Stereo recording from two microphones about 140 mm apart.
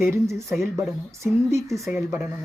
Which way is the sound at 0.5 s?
20° right (ahead or behind).